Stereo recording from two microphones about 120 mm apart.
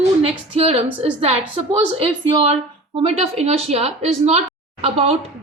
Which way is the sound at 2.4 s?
55° right (ahead or behind).